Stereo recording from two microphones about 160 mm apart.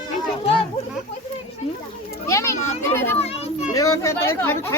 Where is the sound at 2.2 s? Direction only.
20° left (ahead or behind).